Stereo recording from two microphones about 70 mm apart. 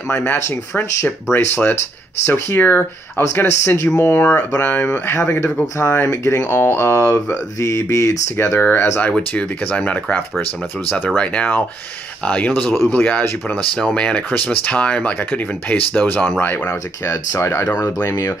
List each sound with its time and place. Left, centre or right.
0.1 s speech: left
4.0 s speech: left
8.5 s speech: left
17.0 s speech: left